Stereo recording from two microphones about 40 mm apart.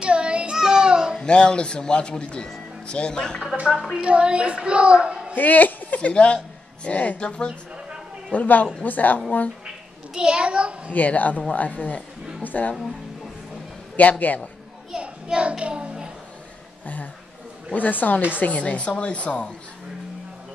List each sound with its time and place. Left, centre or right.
0.0 s child singing: right
1.2 s speech: left
3.5 s a child's voice: right
5.3 s speech: left
6.1 s speech: left
8.3 s a woman's voice: left
10.1 s a child's voice: right
10.9 s a woman's voice: left
13.9 s a woman's voice: left
15.0 s a child's voice: right
16.8 s a woman's voice: left